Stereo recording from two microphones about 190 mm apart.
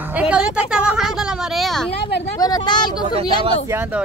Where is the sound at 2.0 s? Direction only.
60° left (ahead or behind).